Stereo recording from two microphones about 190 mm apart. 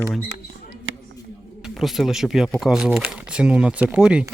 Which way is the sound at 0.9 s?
90° right.